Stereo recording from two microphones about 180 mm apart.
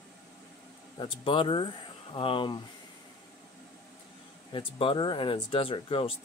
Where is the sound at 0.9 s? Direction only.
25° left (ahead or behind).